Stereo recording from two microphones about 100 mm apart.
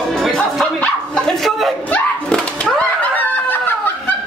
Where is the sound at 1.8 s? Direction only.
10° left (ahead or behind).